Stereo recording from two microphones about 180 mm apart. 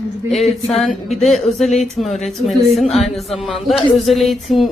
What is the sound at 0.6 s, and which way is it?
Speech, centre (ahead or behind).